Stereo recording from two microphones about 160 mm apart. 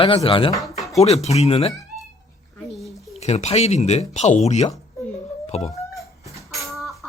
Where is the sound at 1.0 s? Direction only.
40° left (ahead or behind).